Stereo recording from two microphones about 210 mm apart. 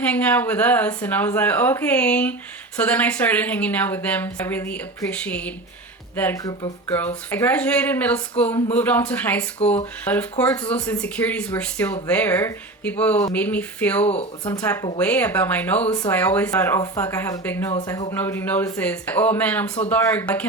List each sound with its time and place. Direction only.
0.0 s a woman's voice: 5° left (ahead or behind)
14.1 s speech: 25° left (ahead or behind)
15.0 s a woman's voice: 5° left (ahead or behind)